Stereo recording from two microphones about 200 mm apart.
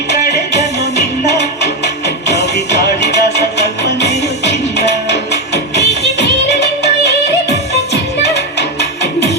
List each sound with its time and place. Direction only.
0.1 s music: 55° left (ahead or behind)
8.2 s music: 55° left (ahead or behind)